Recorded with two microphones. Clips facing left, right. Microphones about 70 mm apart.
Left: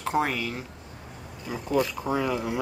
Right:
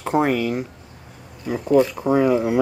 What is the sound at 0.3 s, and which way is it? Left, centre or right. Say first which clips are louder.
Speech: right 10 dB; centre.